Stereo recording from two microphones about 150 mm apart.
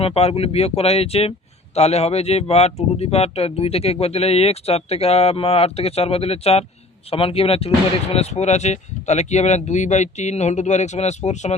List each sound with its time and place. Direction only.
0.0 s speech: 40° left (ahead or behind)